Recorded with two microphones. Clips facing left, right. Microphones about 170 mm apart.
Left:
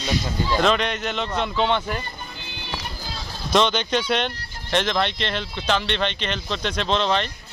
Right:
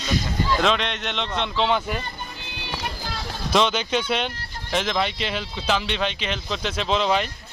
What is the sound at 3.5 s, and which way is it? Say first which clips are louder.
Speech: left 1 dB; 5° right (ahead or behind).